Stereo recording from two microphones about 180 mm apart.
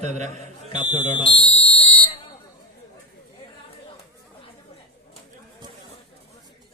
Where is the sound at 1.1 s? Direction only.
30° left (ahead or behind).